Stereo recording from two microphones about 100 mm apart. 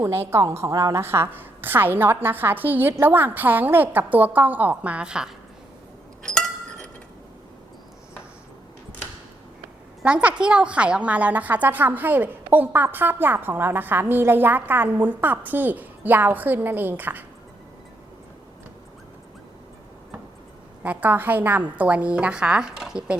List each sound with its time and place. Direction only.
0.0 s a woman's voice: 25° right (ahead or behind); by 5.3 s 10° right (ahead or behind)
6.2 s a sound: 5° left (ahead or behind)
10.0 s a woman's voice: 15° right (ahead or behind)
20.8 s a woman's voice: 15° right (ahead or behind)